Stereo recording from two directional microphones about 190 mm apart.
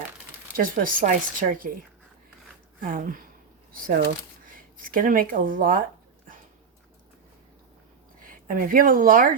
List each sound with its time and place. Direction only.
0.5 s speech: 45° right (ahead or behind)
2.8 s speech: 45° right (ahead or behind)
8.2 s speech: 45° right (ahead or behind)